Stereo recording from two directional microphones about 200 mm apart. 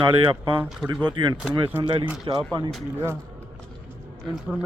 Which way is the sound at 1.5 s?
10° right (ahead or behind).